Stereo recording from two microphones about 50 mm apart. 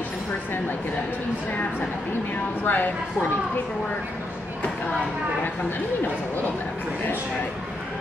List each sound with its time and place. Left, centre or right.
2.6 s speech: left